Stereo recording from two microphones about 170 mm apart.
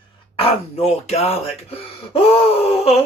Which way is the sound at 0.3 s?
35° left (ahead or behind).